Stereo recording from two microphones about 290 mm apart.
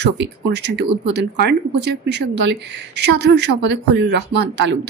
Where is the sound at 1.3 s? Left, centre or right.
Right.